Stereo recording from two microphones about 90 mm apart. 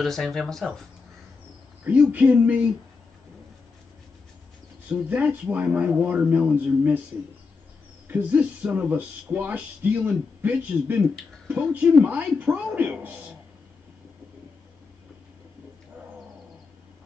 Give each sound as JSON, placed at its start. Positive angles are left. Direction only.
{"t": 0.0, "sound": "speech", "side_deg": 5}
{"t": 1.9, "sound": "speech", "side_deg": -15}
{"t": 4.8, "sound": "speech", "side_deg": -15}
{"t": 8.1, "sound": "speech", "side_deg": -15}